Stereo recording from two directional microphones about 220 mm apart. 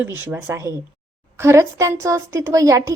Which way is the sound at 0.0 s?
10° right (ahead or behind).